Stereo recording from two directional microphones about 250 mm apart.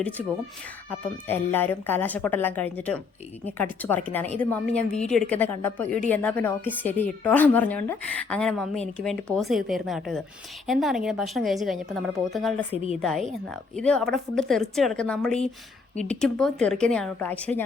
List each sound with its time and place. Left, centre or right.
0.9 s a woman's voice: centre
12.7 s a woman's voice: left
13.0 s speech: centre